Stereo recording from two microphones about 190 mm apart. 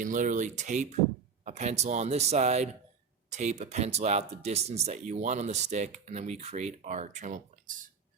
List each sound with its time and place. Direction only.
0.0 s speech: 45° right (ahead or behind)